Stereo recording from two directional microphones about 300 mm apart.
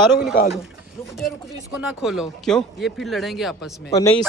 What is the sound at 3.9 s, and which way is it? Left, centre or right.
Speech, left.